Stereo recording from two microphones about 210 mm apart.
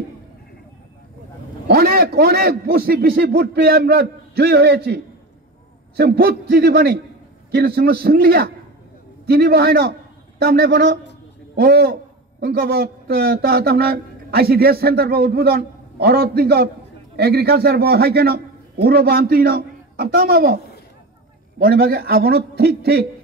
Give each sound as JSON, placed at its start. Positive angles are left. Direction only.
{"t": 1.7, "sound": "a man's voice", "side_deg": -45}